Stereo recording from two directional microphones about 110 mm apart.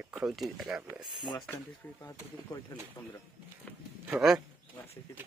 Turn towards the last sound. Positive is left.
turn(degrees=-5)  # may be behind; listen again after turning